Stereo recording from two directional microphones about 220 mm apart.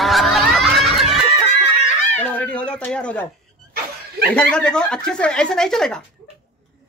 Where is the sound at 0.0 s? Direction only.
Centre (ahead or behind).